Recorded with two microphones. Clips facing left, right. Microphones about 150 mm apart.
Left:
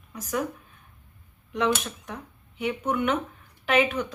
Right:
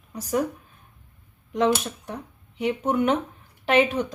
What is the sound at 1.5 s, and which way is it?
A woman's voice, 35° right (ahead or behind).